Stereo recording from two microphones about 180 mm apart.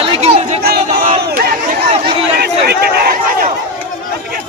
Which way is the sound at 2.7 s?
60° right (ahead or behind).